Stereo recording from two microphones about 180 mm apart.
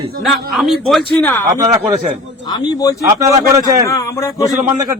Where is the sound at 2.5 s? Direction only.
20° left (ahead or behind).